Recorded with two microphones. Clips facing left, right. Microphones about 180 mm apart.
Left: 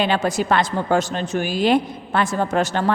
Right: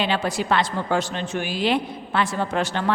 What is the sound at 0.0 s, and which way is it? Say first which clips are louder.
A woman's voice: left 4 dB; 45° left (ahead or behind).